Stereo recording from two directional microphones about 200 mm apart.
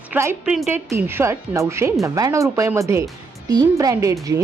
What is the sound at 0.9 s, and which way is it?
Speech, 10° right (ahead or behind).